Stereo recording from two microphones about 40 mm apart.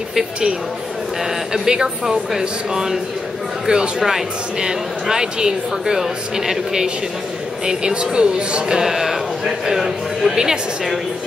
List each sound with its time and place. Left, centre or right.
1.5 s speech: centre
7.6 s speech: right
8.7 s speech: centre